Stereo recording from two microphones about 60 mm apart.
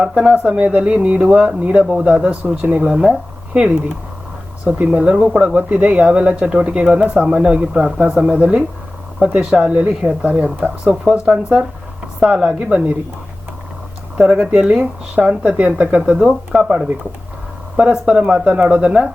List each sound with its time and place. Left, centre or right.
0.2 s speech: centre
12.2 s speech: centre
14.2 s speech: centre